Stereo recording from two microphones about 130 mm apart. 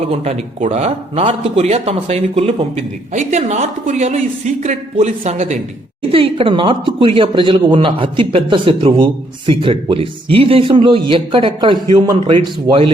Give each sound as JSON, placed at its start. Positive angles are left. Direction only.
{"t": 0.0, "sound": "a man's voice", "side_deg": -55}
{"t": 3.1, "sound": "speech", "side_deg": -65}
{"t": 6.0, "sound": "a man's voice", "side_deg": -45}